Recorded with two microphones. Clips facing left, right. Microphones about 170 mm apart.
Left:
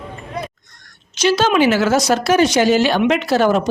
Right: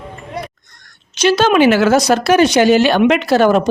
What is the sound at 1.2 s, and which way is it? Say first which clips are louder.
Speech: right 3 dB; 60° right (ahead or behind).